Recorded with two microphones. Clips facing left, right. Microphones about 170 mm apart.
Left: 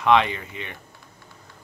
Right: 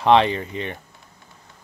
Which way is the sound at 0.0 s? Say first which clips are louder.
Right 3 dB; 30° right (ahead or behind).